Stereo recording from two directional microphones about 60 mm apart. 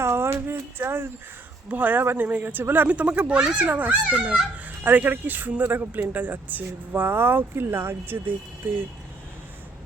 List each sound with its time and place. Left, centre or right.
0.0 s speech: right